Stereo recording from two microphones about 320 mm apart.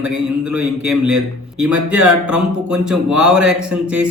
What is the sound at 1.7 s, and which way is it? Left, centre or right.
Speech, right.